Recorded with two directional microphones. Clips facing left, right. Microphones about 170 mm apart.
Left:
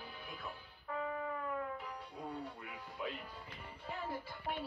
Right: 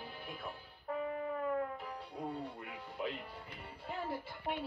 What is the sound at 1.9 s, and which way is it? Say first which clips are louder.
Music: right 3 dB; 30° right (ahead or behind).